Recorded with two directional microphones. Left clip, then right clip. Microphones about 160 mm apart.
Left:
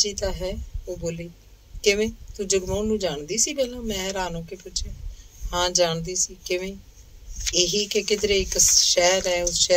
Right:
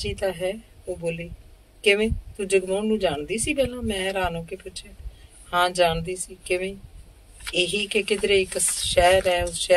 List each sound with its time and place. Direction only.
0.0 s speech: 50° left (ahead or behind)
1.9 s speech: 50° left (ahead or behind)
5.5 s speech: 50° left (ahead or behind)